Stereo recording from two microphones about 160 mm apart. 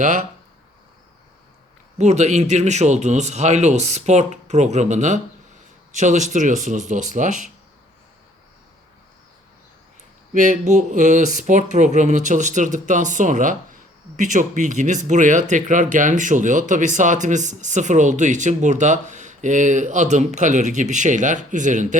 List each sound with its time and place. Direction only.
2.0 s speech: 45° right (ahead or behind)
10.3 s speech: 55° right (ahead or behind)